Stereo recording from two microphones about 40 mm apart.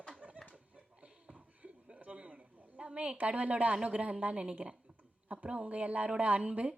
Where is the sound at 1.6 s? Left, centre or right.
Right.